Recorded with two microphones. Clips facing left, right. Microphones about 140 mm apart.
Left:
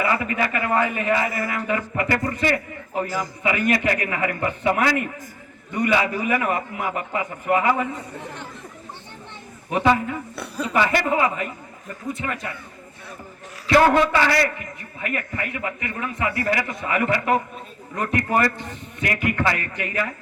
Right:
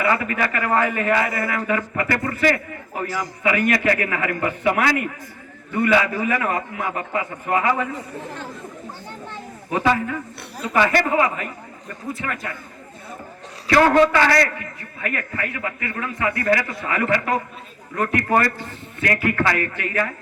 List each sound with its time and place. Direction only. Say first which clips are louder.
0.0 s a man's voice: right 1 dB; 25° left (ahead or behind)
9.7 s a man's voice: left 1 dB; 25° left (ahead or behind)
13.7 s a man's voice: right 1 dB; 25° left (ahead or behind)